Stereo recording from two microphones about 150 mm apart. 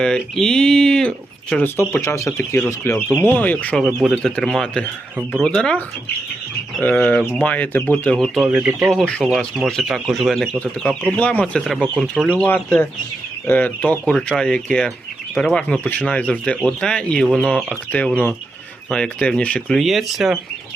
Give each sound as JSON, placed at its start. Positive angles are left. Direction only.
{"t": 0.0, "sound": "speech", "side_deg": 5}